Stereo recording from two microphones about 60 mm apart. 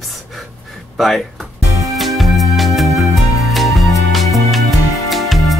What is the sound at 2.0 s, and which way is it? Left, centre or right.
Music, centre.